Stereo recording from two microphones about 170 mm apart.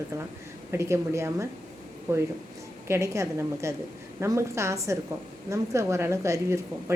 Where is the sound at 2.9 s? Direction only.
15° right (ahead or behind).